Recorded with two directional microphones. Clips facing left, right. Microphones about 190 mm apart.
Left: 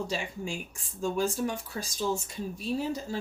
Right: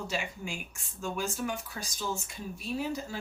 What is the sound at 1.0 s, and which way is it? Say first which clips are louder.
Speech: left 5 dB; 30° left (ahead or behind).